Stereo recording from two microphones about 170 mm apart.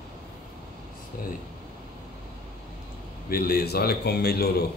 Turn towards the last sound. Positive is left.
turn(degrees=70)  # may be behind; listen again after turning